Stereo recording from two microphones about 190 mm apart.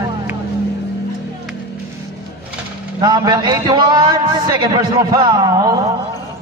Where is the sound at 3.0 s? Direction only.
20° right (ahead or behind).